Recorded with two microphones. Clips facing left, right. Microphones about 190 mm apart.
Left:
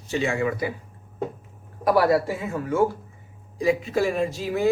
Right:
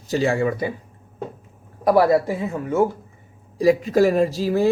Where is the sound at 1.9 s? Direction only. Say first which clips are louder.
Right 3 dB; 25° right (ahead or behind).